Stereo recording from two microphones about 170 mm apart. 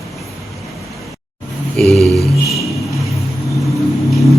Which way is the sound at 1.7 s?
Centre (ahead or behind).